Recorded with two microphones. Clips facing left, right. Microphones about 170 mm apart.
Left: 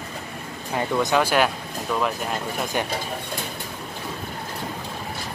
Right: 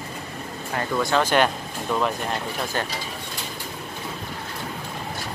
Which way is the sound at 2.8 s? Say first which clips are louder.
Left 2 dB; 15° left (ahead or behind).